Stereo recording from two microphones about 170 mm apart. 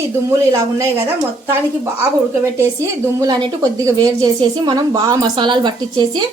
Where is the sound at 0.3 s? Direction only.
15° right (ahead or behind).